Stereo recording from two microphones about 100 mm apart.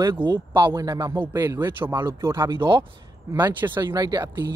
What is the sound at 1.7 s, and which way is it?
Speech, 20° right (ahead or behind).